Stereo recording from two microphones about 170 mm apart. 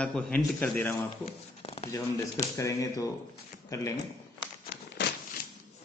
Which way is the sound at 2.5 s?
20° left (ahead or behind).